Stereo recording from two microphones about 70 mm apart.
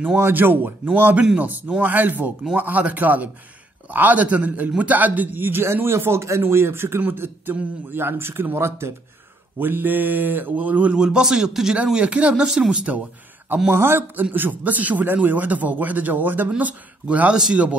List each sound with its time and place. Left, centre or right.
0.2 s a man's voice: right
11.0 s a man's voice: centre
12.4 s a man's voice: centre
13.7 s a man's voice: right; by 17.7 s centre